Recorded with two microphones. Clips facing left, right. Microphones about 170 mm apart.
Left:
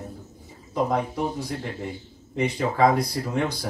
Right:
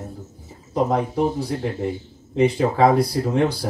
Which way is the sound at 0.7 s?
35° right (ahead or behind).